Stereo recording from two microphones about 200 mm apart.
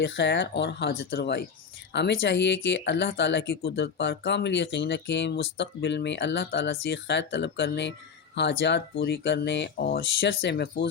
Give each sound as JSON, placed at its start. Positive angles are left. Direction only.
{"t": 0.0, "sound": "speech", "side_deg": 65}